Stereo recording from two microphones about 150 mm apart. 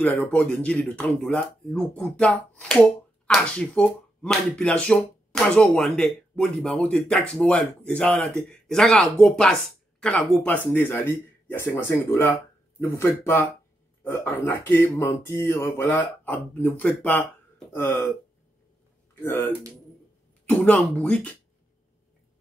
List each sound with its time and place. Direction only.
0.0 s speech: 10° left (ahead or behind)
19.2 s speech: 15° left (ahead or behind)